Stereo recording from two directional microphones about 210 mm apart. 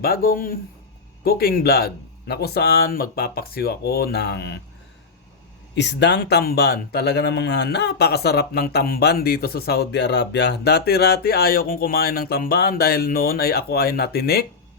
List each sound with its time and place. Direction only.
0.0 s speech: 45° left (ahead or behind)
5.7 s speech: 55° left (ahead or behind)